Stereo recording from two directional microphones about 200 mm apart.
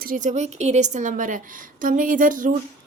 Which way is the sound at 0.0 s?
40° right (ahead or behind).